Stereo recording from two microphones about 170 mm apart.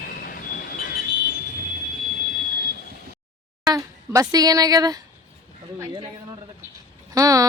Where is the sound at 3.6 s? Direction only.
20° right (ahead or behind).